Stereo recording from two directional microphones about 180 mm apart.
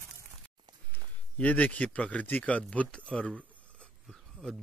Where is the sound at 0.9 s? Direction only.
10° left (ahead or behind).